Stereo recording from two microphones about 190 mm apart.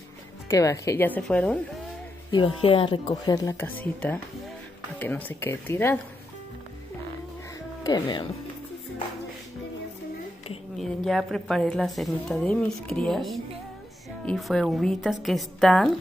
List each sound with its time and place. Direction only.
0.5 s speech: 15° left (ahead or behind)
2.3 s speech: 30° left (ahead or behind)
3.5 s speech: 10° left (ahead or behind)
7.8 s speech: 20° left (ahead or behind)
10.8 s a woman's voice: centre (ahead or behind)